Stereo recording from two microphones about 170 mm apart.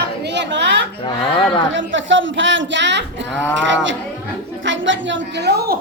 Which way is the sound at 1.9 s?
90° right.